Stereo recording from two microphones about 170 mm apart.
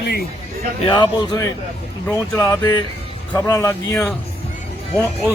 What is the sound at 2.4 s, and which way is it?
Speech, 20° left (ahead or behind).